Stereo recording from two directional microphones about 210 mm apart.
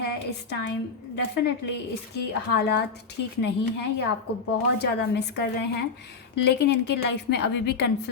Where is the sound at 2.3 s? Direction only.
50° left (ahead or behind).